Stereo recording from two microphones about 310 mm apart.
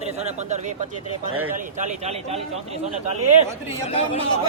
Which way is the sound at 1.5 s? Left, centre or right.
Right.